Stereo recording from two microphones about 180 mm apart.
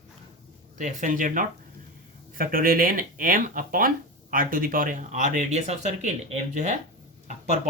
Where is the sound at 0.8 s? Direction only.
45° right (ahead or behind).